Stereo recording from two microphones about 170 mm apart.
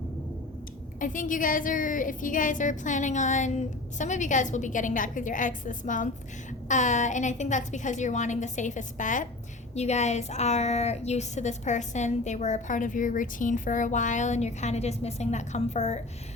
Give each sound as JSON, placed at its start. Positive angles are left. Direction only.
{"t": 0.9, "sound": "a woman's voice", "side_deg": 50}